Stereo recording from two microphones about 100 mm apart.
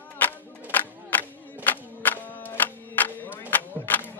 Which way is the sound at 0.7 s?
20° left (ahead or behind).